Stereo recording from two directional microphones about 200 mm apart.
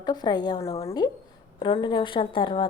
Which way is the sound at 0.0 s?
20° left (ahead or behind).